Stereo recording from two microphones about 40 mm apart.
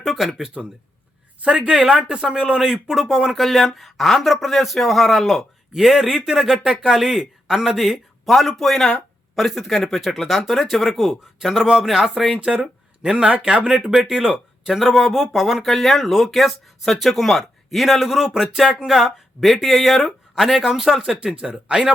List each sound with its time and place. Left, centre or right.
0.0 s a sound: centre
0.4 s speech: centre
7.9 s speech: centre
12.5 s speech: right
13.7 s speech: centre
14.7 s speech: centre
15.7 s speech: centre; by 21.9 s right